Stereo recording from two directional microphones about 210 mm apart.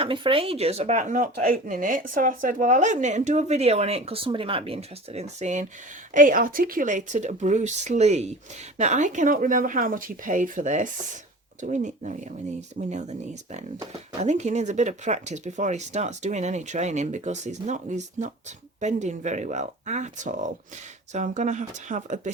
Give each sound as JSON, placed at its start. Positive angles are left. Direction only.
{"t": 0.0, "sound": "speech", "side_deg": -25}